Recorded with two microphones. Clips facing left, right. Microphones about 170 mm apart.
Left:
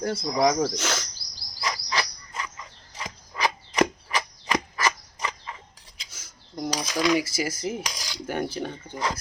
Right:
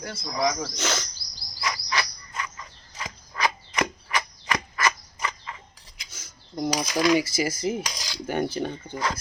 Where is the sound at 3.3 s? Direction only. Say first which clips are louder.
Left 3 dB; 30° left (ahead or behind).